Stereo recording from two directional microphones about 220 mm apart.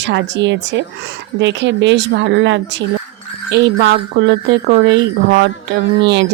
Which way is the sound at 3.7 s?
50° right (ahead or behind).